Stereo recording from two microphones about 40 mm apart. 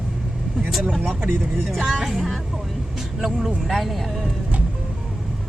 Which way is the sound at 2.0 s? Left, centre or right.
Centre.